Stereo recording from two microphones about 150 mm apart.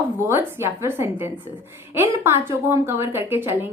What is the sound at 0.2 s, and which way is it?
A woman's voice, 15° right (ahead or behind).